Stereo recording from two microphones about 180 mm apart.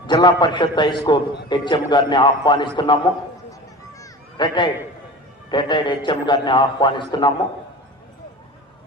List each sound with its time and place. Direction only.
0.1 s a man's voice: 25° left (ahead or behind)
4.4 s a man's voice: 25° left (ahead or behind)